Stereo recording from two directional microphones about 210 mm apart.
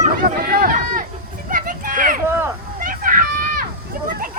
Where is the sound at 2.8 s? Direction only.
40° right (ahead or behind).